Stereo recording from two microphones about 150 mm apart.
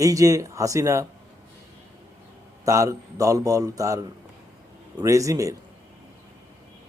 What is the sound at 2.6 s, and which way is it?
Speech, 20° right (ahead or behind).